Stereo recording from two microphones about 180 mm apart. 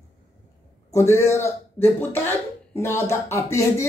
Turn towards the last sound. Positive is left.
turn(degrees=15)  # may be behind; listen again after turning